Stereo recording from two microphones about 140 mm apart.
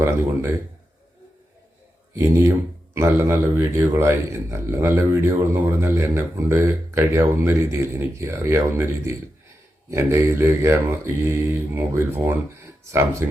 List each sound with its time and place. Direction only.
2.1 s speech: 20° right (ahead or behind)